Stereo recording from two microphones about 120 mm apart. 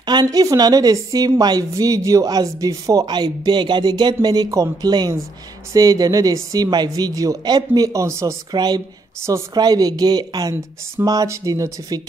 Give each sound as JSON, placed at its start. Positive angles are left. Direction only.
{"t": 0.0, "sound": "a man's voice", "side_deg": -35}
{"t": 8.5, "sound": "a man's voice", "side_deg": -35}